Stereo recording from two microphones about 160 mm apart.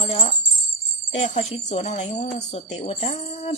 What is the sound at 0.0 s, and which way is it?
Speech, 40° left (ahead or behind).